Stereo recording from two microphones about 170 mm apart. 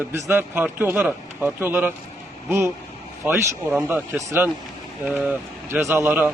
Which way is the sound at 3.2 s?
5° right (ahead or behind).